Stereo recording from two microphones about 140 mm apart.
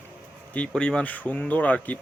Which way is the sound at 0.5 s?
10° left (ahead or behind).